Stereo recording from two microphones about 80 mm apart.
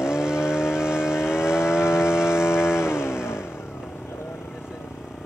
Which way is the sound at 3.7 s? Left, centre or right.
Centre.